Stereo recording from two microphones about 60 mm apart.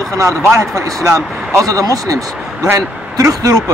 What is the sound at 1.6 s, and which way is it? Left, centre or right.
Speech, right.